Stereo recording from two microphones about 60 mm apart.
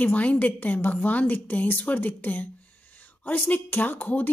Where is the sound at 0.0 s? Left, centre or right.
Left.